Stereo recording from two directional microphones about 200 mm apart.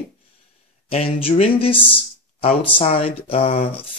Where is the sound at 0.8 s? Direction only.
30° left (ahead or behind).